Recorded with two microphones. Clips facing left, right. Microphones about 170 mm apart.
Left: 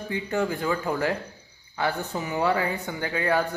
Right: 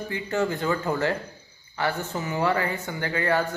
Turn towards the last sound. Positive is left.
turn(degrees=15)  # may be behind; listen again after turning